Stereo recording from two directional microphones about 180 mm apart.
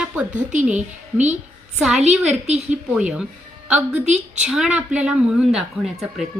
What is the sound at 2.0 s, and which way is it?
Speech, 40° right (ahead or behind).